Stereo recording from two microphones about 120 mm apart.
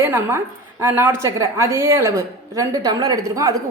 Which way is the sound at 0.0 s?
20° right (ahead or behind).